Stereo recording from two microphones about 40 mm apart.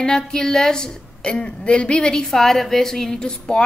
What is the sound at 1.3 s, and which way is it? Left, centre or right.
Speech, left.